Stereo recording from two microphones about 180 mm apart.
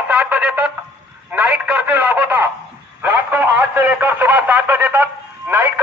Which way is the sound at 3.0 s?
10° right (ahead or behind).